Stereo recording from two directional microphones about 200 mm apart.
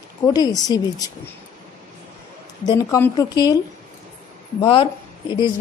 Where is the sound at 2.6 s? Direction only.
20° left (ahead or behind).